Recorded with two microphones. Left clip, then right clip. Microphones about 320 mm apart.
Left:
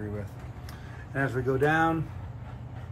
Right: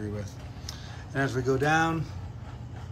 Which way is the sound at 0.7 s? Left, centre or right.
Centre.